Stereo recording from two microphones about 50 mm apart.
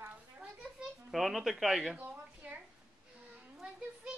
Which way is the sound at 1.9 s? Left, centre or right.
Right.